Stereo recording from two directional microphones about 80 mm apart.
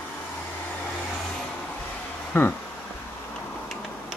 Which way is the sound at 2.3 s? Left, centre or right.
Left.